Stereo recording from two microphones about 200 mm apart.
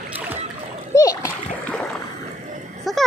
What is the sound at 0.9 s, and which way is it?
Splash, 20° left (ahead or behind).